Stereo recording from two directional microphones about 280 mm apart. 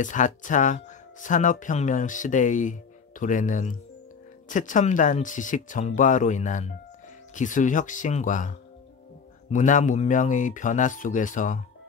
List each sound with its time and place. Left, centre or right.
0.0 s speech: left